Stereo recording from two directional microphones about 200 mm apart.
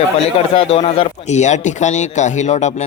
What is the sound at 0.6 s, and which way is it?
Speech, 30° left (ahead or behind).